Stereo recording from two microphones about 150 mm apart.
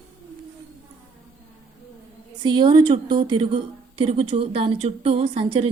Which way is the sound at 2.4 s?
30° right (ahead or behind).